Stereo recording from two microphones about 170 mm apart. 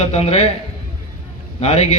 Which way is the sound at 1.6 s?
40° left (ahead or behind).